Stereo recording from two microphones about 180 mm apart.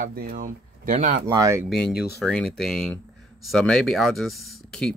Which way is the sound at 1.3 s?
20° right (ahead or behind).